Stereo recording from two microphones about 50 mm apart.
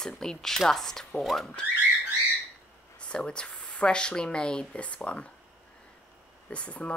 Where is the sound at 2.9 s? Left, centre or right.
Centre.